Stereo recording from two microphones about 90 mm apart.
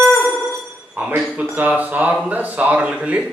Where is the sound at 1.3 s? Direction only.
15° right (ahead or behind).